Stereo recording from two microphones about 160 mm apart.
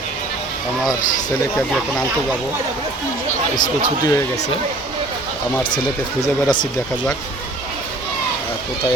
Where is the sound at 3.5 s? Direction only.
25° left (ahead or behind).